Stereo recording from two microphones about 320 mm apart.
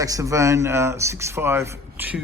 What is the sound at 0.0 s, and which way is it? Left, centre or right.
Speech, centre.